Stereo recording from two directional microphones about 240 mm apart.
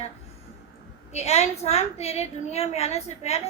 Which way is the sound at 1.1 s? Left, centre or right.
Left.